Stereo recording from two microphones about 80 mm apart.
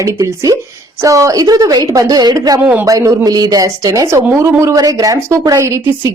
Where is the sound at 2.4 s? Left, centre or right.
Right.